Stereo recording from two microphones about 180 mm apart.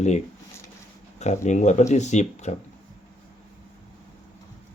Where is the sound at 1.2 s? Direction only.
40° left (ahead or behind).